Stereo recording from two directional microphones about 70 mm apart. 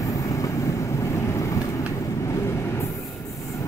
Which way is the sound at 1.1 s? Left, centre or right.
Left.